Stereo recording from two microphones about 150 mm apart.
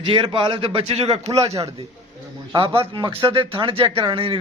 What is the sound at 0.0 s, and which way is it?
A man's voice, 35° right (ahead or behind).